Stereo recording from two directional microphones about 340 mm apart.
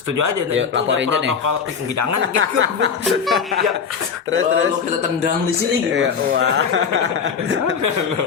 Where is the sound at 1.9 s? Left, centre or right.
Right.